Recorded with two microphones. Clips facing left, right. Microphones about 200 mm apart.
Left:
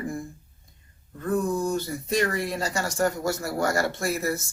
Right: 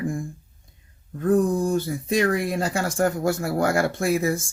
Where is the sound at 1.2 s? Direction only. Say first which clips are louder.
Right 5 dB; 55° right (ahead or behind).